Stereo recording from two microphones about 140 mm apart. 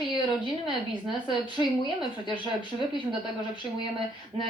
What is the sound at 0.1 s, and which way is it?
A woman's voice, 35° left (ahead or behind).